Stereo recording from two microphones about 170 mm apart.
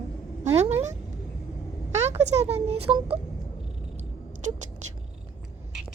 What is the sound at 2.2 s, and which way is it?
Speech, 40° right (ahead or behind).